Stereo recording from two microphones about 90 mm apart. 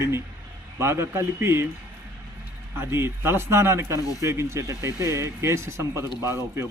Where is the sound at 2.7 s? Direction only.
30° right (ahead or behind).